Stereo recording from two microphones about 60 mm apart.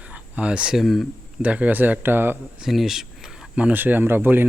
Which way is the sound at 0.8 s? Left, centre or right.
Centre.